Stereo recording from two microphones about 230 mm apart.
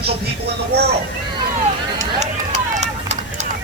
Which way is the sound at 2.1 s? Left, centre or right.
Right.